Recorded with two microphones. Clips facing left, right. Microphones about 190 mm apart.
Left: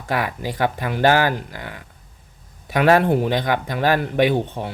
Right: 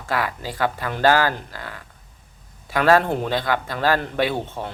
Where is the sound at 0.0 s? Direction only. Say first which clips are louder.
Left 2 dB; 20° left (ahead or behind).